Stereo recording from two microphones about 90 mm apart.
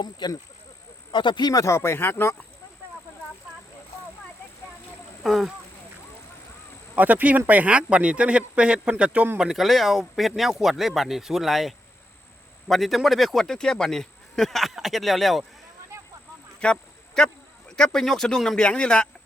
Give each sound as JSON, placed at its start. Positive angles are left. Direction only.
{"t": 0.0, "sound": "speech", "side_deg": 50}
{"t": 1.1, "sound": "speech", "side_deg": 60}
{"t": 1.6, "sound": "speech", "side_deg": 30}
{"t": 5.2, "sound": "speech", "side_deg": 0}
{"t": 6.9, "sound": "speech", "side_deg": -20}
{"t": 9.4, "sound": "speech", "side_deg": -5}
{"t": 16.6, "sound": "speech", "side_deg": 10}